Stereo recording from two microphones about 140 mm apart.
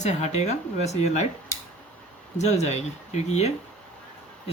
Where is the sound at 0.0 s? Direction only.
55° left (ahead or behind).